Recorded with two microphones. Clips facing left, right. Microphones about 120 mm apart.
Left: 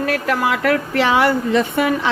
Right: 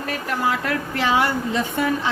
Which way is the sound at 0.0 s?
90° left.